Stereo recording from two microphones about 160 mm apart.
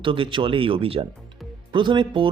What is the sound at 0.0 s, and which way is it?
Speech, 30° right (ahead or behind).